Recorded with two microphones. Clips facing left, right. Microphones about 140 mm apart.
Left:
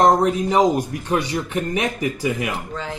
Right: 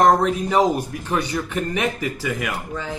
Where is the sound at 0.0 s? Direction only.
15° left (ahead or behind).